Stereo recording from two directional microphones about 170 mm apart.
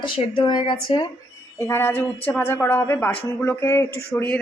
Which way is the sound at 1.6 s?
15° left (ahead or behind).